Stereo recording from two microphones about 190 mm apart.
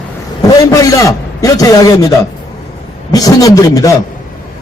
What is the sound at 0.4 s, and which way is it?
A man's voice, 15° left (ahead or behind).